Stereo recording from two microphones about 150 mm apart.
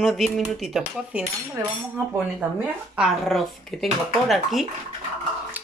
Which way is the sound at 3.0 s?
Centre (ahead or behind).